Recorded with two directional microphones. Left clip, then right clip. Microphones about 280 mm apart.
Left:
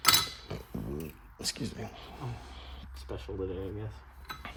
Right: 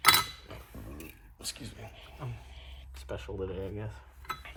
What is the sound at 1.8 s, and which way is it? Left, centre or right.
Speech, left.